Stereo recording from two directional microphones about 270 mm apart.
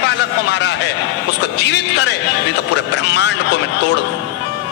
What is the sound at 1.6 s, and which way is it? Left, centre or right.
A man's voice, left.